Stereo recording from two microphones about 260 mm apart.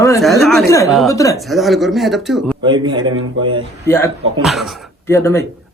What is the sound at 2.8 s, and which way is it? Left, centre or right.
Speech, centre.